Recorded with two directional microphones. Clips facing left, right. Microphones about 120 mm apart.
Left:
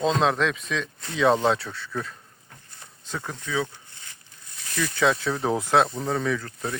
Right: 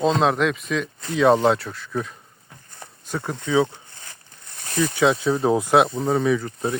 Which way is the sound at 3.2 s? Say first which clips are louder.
Right 8 dB; 25° right (ahead or behind).